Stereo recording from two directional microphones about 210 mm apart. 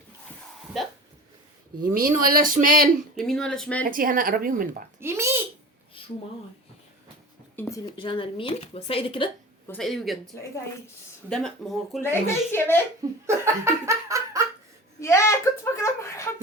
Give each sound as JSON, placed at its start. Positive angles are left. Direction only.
{"t": 1.8, "sound": "speech", "side_deg": -45}
{"t": 3.2, "sound": "speech", "side_deg": 0}
{"t": 3.8, "sound": "speech", "side_deg": -40}
{"t": 4.9, "sound": "a sound", "side_deg": -10}
{"t": 7.5, "sound": "speech", "side_deg": 10}
{"t": 7.9, "sound": "a woman's voice", "side_deg": 25}
{"t": 9.6, "sound": "speech", "side_deg": 0}
{"t": 11.3, "sound": "speech", "side_deg": 0}
{"t": 13.2, "sound": "laughter", "side_deg": -10}
{"t": 15.0, "sound": "speech", "side_deg": 15}